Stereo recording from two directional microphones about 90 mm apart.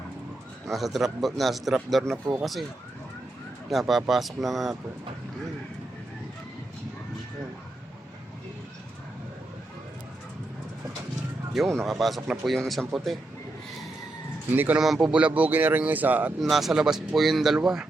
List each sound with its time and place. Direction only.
0.7 s speech: centre (ahead or behind)
3.7 s speech: centre (ahead or behind)
11.5 s speech: centre (ahead or behind)
14.5 s speech: 20° right (ahead or behind)
16.4 s speech: centre (ahead or behind)